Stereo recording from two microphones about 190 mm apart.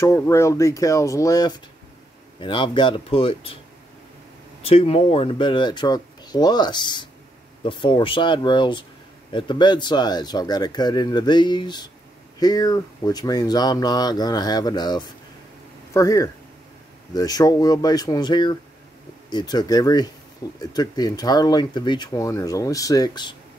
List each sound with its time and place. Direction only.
0.0 s speech: 15° left (ahead or behind)
4.6 s speech: 30° left (ahead or behind)